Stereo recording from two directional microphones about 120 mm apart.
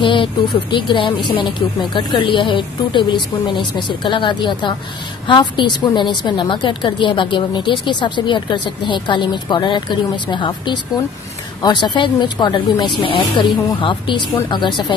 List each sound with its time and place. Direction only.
0.0 s a woman's voice: 40° left (ahead or behind)